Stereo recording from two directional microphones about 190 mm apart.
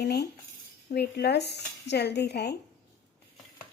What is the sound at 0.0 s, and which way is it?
Speech, 60° left (ahead or behind).